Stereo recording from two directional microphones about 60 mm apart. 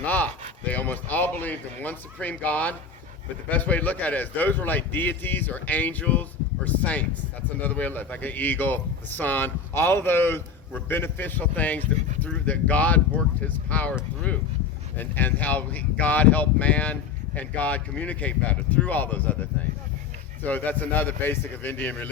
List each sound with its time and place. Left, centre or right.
0.0 s speech: left
14.9 s speech: left
20.4 s speech: left